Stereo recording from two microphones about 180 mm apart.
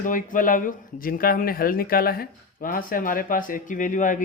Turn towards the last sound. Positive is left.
turn(degrees=45)  # may be behind; listen again after turning